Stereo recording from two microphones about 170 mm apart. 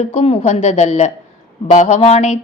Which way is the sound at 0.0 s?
40° left (ahead or behind).